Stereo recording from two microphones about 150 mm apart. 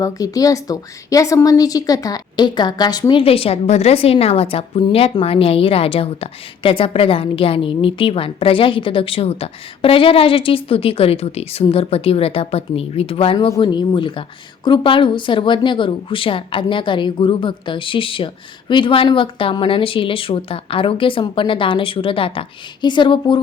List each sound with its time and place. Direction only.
0.0 s a woman's voice: 25° left (ahead or behind)